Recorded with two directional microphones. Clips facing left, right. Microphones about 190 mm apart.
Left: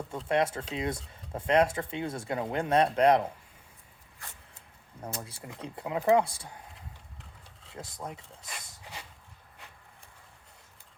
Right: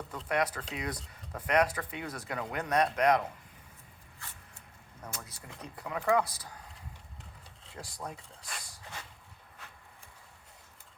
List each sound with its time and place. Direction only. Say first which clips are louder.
0.3 s speech: left 4 dB; 25° left (ahead or behind)
5.0 s speech: left 6 dB; 30° left (ahead or behind)
7.8 s speech: left 2 dB; 20° left (ahead or behind)
8.7 s a sound: left 1 dB; 15° left (ahead or behind)